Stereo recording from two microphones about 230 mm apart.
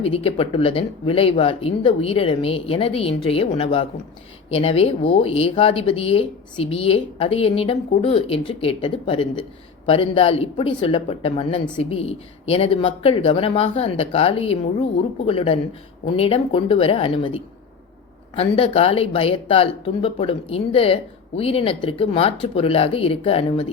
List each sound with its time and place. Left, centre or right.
0.0 s speech: left